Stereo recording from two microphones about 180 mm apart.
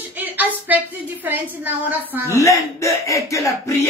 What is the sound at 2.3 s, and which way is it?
Speech, 15° left (ahead or behind).